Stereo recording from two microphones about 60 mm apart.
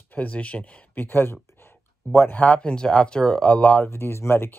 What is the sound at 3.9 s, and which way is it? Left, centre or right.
Speech, left.